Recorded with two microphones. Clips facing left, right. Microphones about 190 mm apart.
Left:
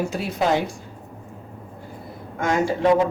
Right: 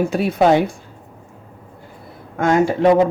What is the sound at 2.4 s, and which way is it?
Speech, 55° right (ahead or behind).